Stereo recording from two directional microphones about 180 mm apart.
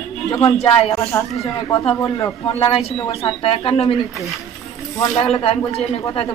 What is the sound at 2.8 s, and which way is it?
Speech, 25° left (ahead or behind).